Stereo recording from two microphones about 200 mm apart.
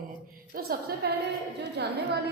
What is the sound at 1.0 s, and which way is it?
Speech, 50° right (ahead or behind).